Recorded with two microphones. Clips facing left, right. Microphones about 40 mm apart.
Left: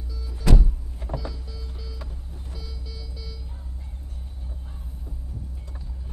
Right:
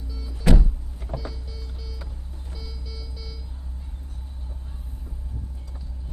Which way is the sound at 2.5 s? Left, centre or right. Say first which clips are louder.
Right 1 dB; centre.